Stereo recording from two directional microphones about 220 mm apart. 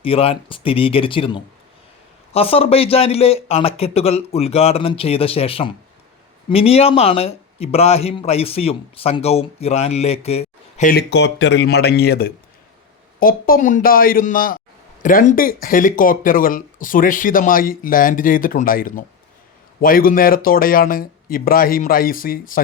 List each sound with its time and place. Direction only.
0.0 s speech: 25° left (ahead or behind)